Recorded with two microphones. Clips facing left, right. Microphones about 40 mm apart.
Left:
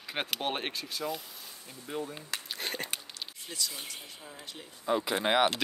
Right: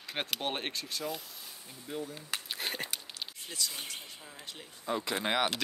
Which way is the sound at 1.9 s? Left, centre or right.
Left.